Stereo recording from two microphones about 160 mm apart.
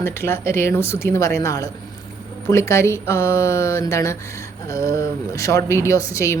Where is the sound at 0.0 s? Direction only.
15° left (ahead or behind).